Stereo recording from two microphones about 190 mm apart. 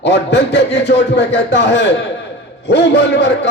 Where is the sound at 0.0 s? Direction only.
65° left (ahead or behind).